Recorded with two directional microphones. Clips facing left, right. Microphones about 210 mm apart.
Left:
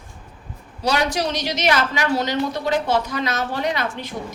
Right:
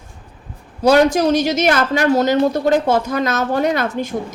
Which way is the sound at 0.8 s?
50° right (ahead or behind).